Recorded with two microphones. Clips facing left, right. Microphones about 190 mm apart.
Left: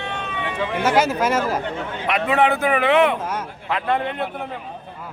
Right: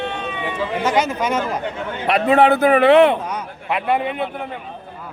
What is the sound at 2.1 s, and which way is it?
Speech, 35° right (ahead or behind).